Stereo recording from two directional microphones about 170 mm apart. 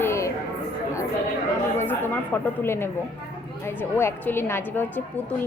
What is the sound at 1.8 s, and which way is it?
A woman's voice, 10° left (ahead or behind).